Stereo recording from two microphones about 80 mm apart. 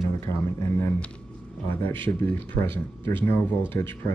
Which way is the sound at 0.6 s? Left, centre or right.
Left.